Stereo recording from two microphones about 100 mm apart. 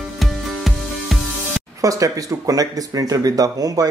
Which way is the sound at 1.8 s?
35° right (ahead or behind).